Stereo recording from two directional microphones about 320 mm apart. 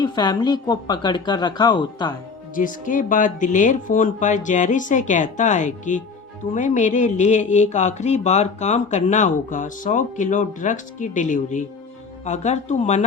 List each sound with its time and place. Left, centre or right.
0.0 s a woman's voice: centre
2.6 s speech: left